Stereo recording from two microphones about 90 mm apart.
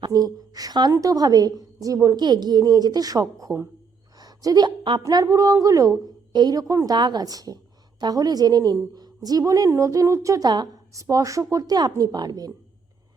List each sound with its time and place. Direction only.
0.1 s a woman's voice: 45° right (ahead or behind)
2.2 s a woman's voice: 50° right (ahead or behind)
4.2 s a sound: 45° right (ahead or behind)
4.8 s a woman's voice: 65° right (ahead or behind)
5.0 s a woman's voice: 40° right (ahead or behind)
6.3 s a woman's voice: 50° right (ahead or behind)